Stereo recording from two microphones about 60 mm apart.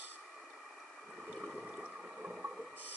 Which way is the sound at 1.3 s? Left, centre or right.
Centre.